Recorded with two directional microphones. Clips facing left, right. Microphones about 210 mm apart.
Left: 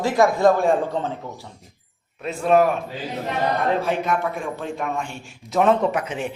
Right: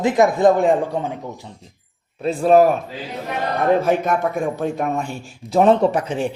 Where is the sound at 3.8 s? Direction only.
45° right (ahead or behind).